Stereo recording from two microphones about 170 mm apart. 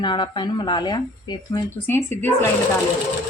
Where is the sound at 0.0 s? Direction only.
25° left (ahead or behind).